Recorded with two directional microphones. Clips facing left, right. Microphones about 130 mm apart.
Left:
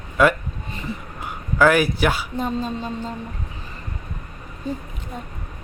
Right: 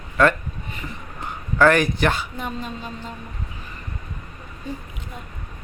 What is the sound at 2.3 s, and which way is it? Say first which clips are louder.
Speech: left 6 dB; 30° left (ahead or behind).